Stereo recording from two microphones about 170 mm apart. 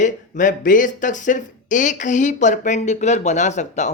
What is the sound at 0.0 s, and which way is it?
Speech, 50° left (ahead or behind).